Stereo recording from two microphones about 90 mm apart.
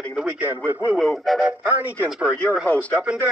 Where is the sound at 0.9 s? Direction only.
5° left (ahead or behind).